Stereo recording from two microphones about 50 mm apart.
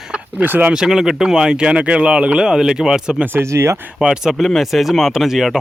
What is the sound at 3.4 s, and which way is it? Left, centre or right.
Speech, right.